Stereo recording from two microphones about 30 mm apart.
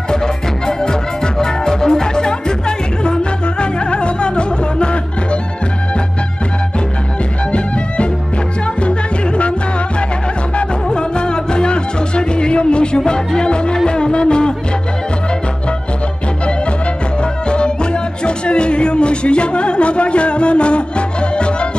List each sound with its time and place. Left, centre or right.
0.7 s music: left
10.9 s music: left
17.2 s music: left